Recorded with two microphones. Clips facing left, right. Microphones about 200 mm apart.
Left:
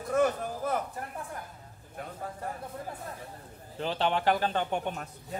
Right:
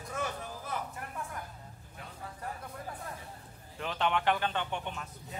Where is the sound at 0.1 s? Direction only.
50° left (ahead or behind).